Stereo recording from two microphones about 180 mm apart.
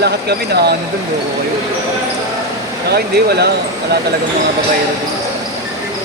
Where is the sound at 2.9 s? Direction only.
65° right (ahead or behind).